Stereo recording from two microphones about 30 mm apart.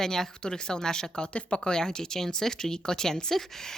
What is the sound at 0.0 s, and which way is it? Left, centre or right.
A woman's voice, centre.